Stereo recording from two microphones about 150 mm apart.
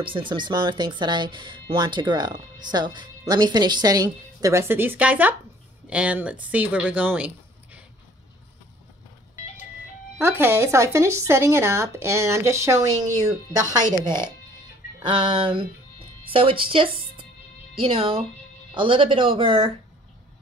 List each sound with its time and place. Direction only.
0.0 s speech: 35° right (ahead or behind); by 7.8 s 10° right (ahead or behind)
10.1 s speech: 15° right (ahead or behind)
13.9 s speech: 30° right (ahead or behind)